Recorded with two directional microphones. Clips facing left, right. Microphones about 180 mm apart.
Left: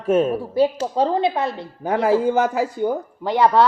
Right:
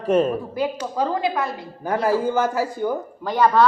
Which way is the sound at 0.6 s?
30° left (ahead or behind).